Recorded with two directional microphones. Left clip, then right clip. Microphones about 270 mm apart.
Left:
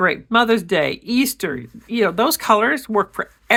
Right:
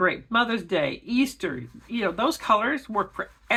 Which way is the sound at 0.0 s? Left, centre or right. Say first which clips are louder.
Left 6 dB; left.